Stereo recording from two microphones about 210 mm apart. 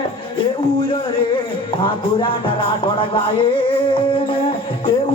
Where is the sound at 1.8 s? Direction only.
25° left (ahead or behind).